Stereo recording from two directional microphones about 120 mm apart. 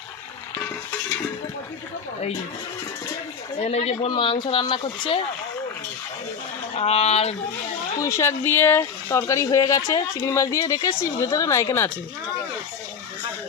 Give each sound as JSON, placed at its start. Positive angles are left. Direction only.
{"t": 3.6, "sound": "speech", "side_deg": 60}
{"t": 4.1, "sound": "speech", "side_deg": 45}
{"t": 6.7, "sound": "speech", "side_deg": 55}
{"t": 7.9, "sound": "speech", "side_deg": 25}